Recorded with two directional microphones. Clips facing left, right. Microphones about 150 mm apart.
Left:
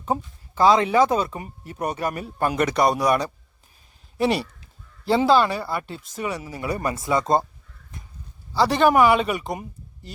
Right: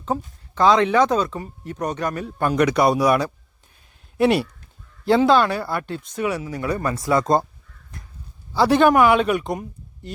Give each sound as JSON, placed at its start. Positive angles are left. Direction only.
{"t": 0.1, "sound": "speech", "side_deg": 20}
{"t": 0.5, "sound": "speech", "side_deg": 5}
{"t": 7.0, "sound": "speech", "side_deg": 0}
{"t": 8.5, "sound": "speech", "side_deg": 0}